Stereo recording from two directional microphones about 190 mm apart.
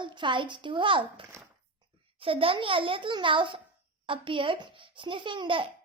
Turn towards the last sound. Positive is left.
turn(degrees=-25)  # may be behind; listen again after turning